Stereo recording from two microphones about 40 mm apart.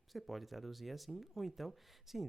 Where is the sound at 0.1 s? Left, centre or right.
Centre.